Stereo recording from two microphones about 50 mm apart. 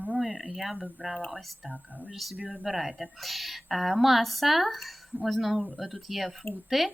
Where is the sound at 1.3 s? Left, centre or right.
Centre.